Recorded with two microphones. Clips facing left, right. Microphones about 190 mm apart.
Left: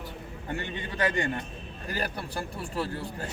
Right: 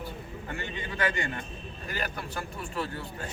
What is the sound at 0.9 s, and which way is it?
Speech, 35° left (ahead or behind).